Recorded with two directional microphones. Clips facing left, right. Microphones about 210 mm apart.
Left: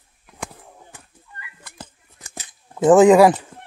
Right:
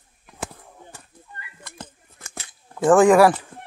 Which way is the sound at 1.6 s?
5° left (ahead or behind).